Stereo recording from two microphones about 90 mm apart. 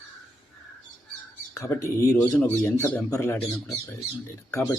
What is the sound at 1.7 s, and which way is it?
A man's voice, 35° left (ahead or behind).